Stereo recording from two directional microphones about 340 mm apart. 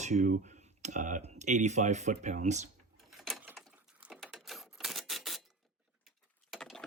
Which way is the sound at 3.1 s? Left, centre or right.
Centre.